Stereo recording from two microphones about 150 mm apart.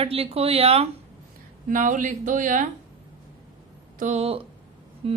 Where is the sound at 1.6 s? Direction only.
60° right (ahead or behind).